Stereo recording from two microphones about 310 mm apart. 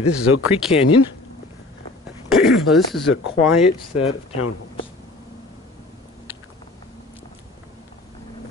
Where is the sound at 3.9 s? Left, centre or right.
Left.